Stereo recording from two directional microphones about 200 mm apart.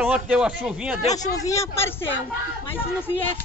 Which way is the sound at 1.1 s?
15° left (ahead or behind).